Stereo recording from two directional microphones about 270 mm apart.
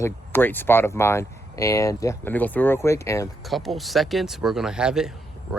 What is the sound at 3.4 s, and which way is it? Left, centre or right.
Speech, centre.